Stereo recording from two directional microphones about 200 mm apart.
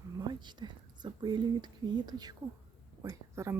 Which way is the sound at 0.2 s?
20° right (ahead or behind).